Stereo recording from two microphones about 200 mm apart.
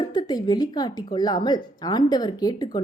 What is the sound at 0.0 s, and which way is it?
A woman's voice, 20° left (ahead or behind).